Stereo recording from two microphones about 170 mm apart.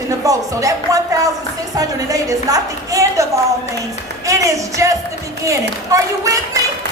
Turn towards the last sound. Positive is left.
turn(degrees=-20)  # may be behind; listen again after turning